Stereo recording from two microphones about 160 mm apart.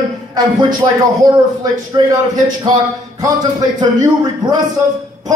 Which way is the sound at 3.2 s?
25° right (ahead or behind).